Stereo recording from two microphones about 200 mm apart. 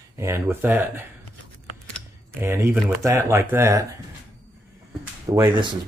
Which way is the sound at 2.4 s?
10° right (ahead or behind).